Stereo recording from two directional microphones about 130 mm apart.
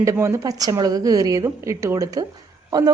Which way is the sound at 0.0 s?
20° right (ahead or behind).